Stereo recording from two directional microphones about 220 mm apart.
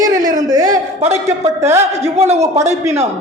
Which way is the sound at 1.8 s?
30° right (ahead or behind).